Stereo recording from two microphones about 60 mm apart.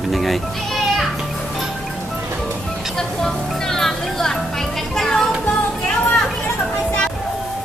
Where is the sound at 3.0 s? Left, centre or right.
Centre.